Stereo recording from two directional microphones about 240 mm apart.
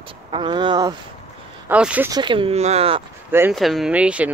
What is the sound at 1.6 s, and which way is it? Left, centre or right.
Speech, centre.